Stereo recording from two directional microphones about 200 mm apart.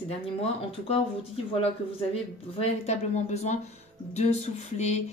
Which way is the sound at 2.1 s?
30° left (ahead or behind).